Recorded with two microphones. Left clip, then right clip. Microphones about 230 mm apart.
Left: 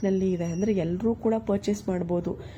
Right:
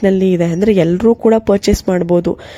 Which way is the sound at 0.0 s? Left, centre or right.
Right.